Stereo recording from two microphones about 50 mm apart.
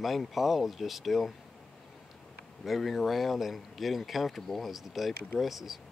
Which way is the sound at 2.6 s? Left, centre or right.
Centre.